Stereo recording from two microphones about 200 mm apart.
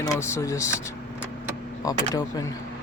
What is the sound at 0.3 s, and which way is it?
Speech, 15° left (ahead or behind).